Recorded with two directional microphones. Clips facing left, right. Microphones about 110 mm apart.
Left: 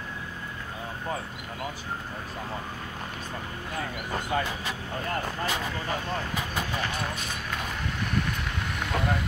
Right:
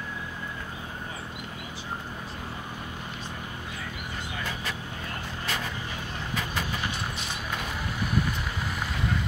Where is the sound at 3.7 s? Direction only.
50° left (ahead or behind).